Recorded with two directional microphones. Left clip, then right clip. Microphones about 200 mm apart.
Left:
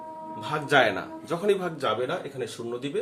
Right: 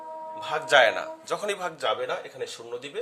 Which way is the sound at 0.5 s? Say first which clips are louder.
Right 2 dB; 40° right (ahead or behind).